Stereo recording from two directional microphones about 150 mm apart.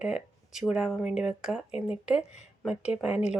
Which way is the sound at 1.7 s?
45° left (ahead or behind).